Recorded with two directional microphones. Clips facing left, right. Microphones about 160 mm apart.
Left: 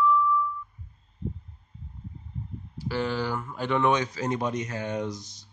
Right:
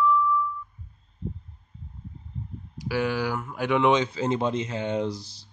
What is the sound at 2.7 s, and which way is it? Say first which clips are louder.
Speech: right 2 dB; 10° right (ahead or behind).